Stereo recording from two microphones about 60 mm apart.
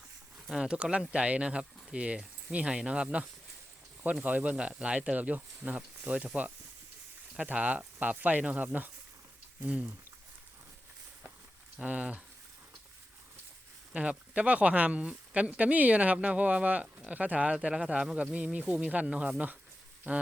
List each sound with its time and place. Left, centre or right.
0.5 s speech: centre
11.8 s speech: centre
13.9 s speech: right